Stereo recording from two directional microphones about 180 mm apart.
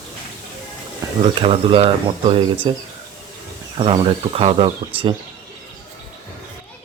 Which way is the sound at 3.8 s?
30° right (ahead or behind).